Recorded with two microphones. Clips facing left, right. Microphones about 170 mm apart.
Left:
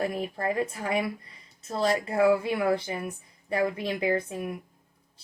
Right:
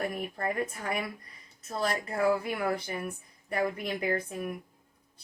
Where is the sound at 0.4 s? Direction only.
25° left (ahead or behind).